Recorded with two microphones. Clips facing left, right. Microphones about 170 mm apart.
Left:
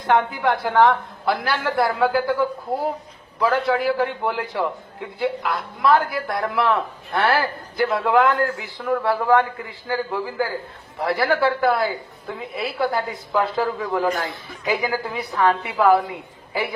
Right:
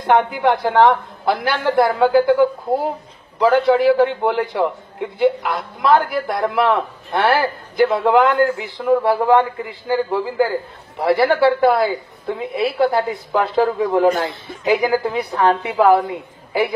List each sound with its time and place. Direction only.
0.0 s a woman's voice: 20° right (ahead or behind)